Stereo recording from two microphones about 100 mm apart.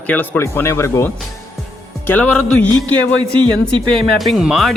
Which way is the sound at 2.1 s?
15° left (ahead or behind).